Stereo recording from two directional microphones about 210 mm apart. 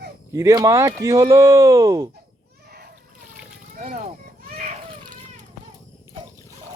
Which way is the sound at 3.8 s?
35° right (ahead or behind).